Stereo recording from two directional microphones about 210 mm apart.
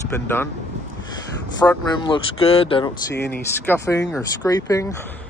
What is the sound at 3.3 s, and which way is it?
Speech, 10° left (ahead or behind).